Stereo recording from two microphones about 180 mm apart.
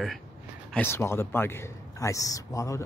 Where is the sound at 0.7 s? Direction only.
15° left (ahead or behind).